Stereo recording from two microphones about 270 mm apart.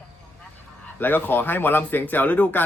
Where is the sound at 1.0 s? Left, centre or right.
Centre.